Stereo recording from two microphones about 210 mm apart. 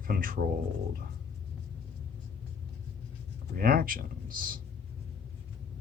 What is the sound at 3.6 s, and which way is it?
Speech, 45° right (ahead or behind).